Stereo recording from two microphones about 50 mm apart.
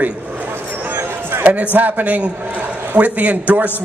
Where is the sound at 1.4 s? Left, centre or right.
Right.